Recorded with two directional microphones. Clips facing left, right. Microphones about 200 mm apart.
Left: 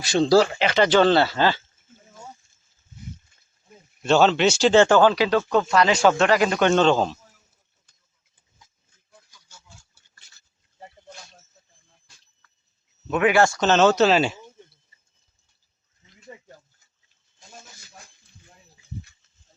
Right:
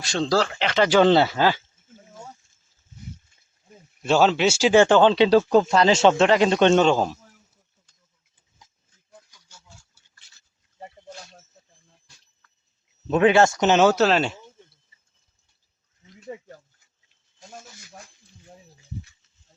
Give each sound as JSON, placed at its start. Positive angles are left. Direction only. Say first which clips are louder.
{"t": 0.0, "sound": "speech", "louder": "left 5 dB", "side_deg": 5}
{"t": 0.9, "sound": "speech", "louder": "right 2 dB", "side_deg": -15}
{"t": 4.0, "sound": "speech", "louder": "left 1 dB", "side_deg": -10}
{"t": 6.7, "sound": "speech", "louder": "even", "side_deg": -10}
{"t": 13.1, "sound": "speech", "louder": "right 2 dB", "side_deg": -30}